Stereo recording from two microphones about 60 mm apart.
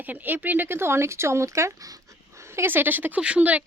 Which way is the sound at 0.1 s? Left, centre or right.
Right.